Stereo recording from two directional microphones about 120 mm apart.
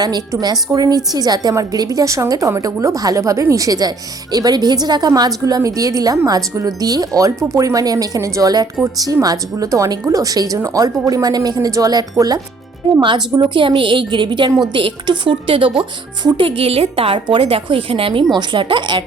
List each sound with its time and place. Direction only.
0.0 s a woman's voice: 35° right (ahead or behind)